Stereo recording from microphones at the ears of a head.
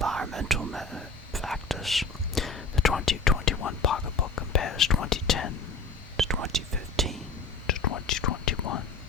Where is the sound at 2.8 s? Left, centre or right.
Left.